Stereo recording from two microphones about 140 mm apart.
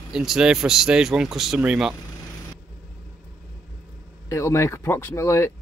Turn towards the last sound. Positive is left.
turn(degrees=20)  # may be behind; listen again after turning